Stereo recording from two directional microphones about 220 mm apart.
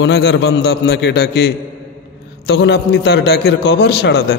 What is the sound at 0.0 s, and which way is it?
A man's voice, 50° left (ahead or behind).